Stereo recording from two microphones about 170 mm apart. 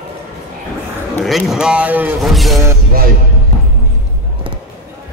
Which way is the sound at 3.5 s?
40° left (ahead or behind).